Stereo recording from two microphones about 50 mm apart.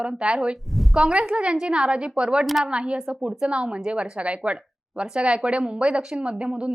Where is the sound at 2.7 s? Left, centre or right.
Right.